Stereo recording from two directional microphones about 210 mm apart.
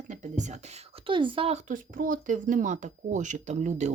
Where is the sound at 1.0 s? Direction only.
25° right (ahead or behind).